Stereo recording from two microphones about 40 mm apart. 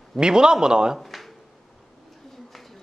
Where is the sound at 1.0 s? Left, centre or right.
Centre.